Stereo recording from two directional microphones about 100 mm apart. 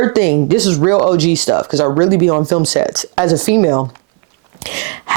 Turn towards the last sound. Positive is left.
turn(degrees=-20)  # may be behind; listen again after turning